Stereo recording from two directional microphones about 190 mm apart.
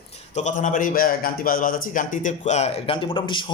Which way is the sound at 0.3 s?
40° left (ahead or behind).